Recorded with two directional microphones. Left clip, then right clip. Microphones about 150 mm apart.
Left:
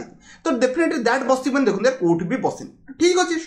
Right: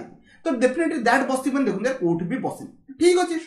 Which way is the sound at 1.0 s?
5° right (ahead or behind).